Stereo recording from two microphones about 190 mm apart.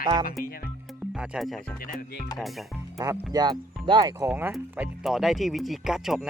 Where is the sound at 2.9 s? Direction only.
15° right (ahead or behind).